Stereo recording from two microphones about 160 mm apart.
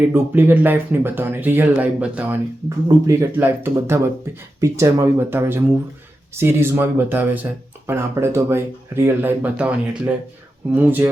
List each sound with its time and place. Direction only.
0.1 s speech: 15° right (ahead or behind)
10.8 s speech: 10° right (ahead or behind)